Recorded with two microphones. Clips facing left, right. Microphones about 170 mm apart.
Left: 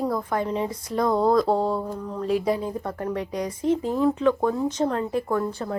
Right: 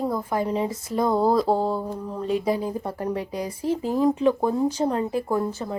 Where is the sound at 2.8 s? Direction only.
30° right (ahead or behind).